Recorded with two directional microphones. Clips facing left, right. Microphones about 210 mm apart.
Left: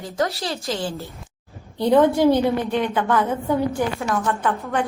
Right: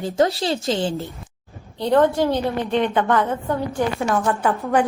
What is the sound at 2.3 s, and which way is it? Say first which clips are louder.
Speech: left 1 dB; 20° right (ahead or behind).